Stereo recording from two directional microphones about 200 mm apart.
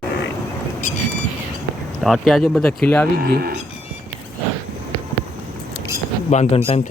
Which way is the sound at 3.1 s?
50° right (ahead or behind).